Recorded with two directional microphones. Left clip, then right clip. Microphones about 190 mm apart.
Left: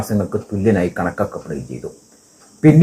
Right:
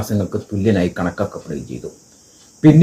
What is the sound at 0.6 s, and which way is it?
Speech, 20° right (ahead or behind).